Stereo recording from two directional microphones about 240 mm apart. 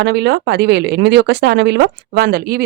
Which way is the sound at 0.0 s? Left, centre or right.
Right.